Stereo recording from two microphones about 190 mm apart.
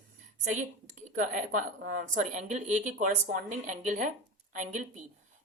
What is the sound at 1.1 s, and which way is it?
A woman's voice, 45° right (ahead or behind).